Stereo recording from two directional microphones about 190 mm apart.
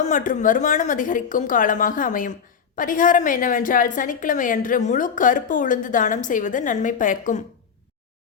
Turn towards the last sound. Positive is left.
turn(degrees=45)  # may be behind; listen again after turning